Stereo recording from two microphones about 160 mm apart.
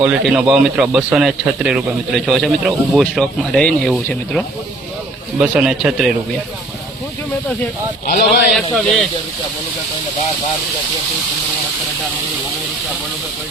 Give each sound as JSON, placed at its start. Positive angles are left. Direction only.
{"t": 0.0, "sound": "speech", "side_deg": -5}
{"t": 8.0, "sound": "speech", "side_deg": 65}
{"t": 8.7, "sound": "speech", "side_deg": 5}